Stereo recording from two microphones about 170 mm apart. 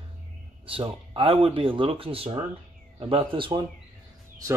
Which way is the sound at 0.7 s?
30° right (ahead or behind).